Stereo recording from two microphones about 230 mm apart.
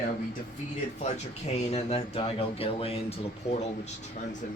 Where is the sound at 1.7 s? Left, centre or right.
Left.